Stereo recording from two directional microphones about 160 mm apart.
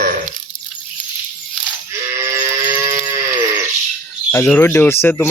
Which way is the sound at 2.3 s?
15° right (ahead or behind).